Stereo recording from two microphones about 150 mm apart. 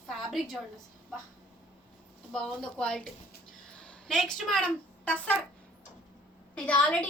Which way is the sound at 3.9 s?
Centre (ahead or behind).